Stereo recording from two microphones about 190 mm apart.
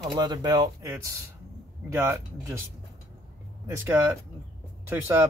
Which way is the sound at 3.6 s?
10° right (ahead or behind).